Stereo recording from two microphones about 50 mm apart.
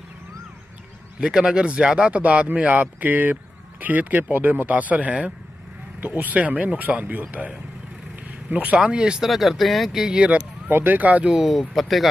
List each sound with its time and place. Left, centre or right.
1.2 s speech: centre
9.2 s speech: centre
10.1 s speech: right
10.7 s speech: right
11.4 s speech: centre